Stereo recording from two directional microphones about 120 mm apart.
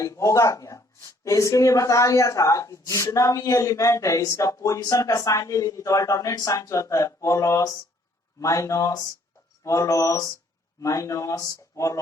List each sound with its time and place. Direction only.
0.0 s speech: 25° left (ahead or behind)